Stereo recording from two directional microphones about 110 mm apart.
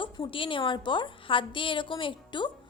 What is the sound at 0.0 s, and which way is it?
A woman's voice, 50° left (ahead or behind).